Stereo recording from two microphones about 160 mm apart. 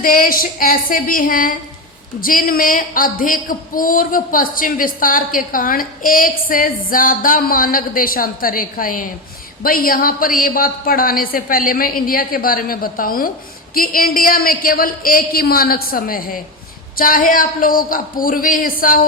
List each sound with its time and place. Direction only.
0.0 s speech: 60° left (ahead or behind)